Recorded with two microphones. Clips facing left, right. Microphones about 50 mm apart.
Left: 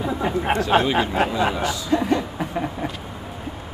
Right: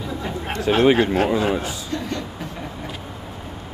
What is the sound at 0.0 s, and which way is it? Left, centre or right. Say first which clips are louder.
Chatter: left 5 dB; left.